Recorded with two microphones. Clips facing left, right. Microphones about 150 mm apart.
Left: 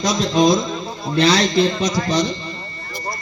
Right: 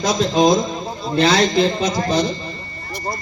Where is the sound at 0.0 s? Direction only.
50° right (ahead or behind).